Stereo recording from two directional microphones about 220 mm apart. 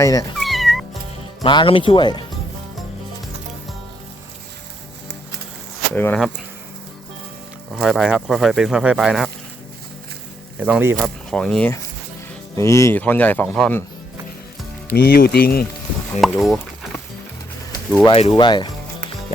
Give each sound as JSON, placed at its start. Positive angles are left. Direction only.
{"t": 0.0, "sound": "speech", "side_deg": 15}
{"t": 0.3, "sound": "cat", "side_deg": 0}
{"t": 1.4, "sound": "speech", "side_deg": 20}
{"t": 5.9, "sound": "speech", "side_deg": 10}
{"t": 7.7, "sound": "speech", "side_deg": 0}
{"t": 10.6, "sound": "speech", "side_deg": -10}
{"t": 14.8, "sound": "speech", "side_deg": 45}
{"t": 16.4, "sound": "a sound", "side_deg": 0}
{"t": 18.0, "sound": "speech", "side_deg": 20}